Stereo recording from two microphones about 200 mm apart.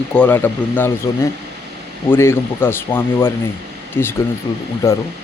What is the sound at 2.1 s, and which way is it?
Speech, 10° left (ahead or behind).